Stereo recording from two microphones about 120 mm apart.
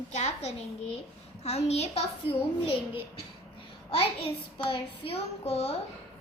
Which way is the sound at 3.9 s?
50° left (ahead or behind).